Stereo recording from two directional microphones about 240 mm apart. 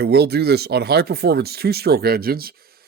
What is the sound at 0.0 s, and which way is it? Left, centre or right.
Speech, right.